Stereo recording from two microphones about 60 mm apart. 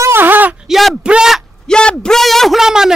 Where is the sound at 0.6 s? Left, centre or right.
Centre.